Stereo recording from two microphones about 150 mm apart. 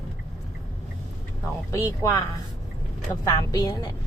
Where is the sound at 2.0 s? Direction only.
20° left (ahead or behind).